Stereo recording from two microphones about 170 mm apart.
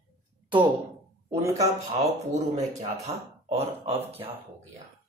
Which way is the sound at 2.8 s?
20° right (ahead or behind).